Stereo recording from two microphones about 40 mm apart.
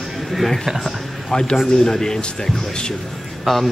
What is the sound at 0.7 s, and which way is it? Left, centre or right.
Speech, centre.